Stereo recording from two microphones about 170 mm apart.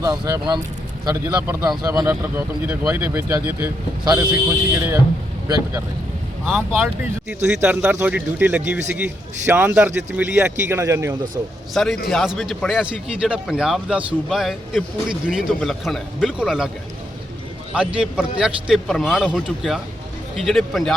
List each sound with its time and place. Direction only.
0.0 s speech: 20° right (ahead or behind)
2.0 s speech: 10° right (ahead or behind)
7.6 s speech: 10° right (ahead or behind)
11.7 s a man's voice: centre (ahead or behind)
17.7 s a man's voice: 5° right (ahead or behind)